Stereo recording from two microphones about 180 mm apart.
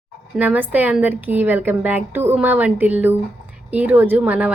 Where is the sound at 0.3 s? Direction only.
10° right (ahead or behind).